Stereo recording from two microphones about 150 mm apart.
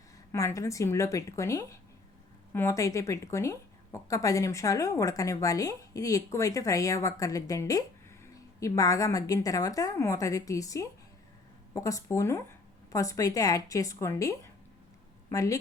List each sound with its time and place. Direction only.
0.3 s a woman's voice: 20° left (ahead or behind)